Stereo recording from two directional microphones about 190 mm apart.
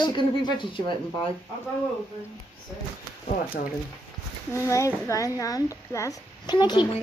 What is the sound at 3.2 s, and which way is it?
Speech, 45° left (ahead or behind).